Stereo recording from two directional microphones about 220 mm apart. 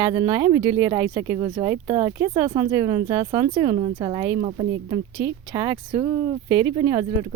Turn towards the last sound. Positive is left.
turn(degrees=-20)  # may be behind; listen again after turning